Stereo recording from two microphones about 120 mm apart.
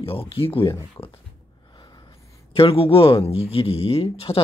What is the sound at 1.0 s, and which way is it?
Speech, 20° left (ahead or behind).